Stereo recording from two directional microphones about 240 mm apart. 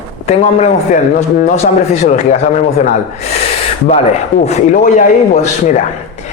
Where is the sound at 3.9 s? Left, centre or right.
Left.